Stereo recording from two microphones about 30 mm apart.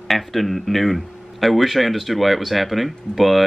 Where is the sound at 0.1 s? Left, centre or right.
Centre.